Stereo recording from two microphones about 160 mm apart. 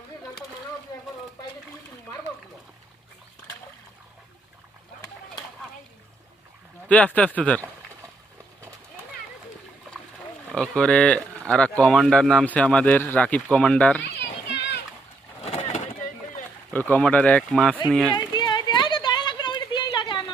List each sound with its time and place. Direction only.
6.8 s speech: 10° left (ahead or behind)
10.5 s speech: 5° left (ahead or behind)
14.0 s children playing: 90° left
15.4 s vehicle: 45° left (ahead or behind)
16.7 s speech: 10° left (ahead or behind)
18.3 s a sound: 25° left (ahead or behind)